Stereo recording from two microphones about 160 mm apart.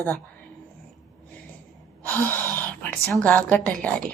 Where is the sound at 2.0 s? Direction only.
15° left (ahead or behind).